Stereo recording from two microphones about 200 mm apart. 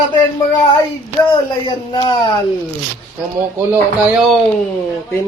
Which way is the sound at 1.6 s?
20° left (ahead or behind).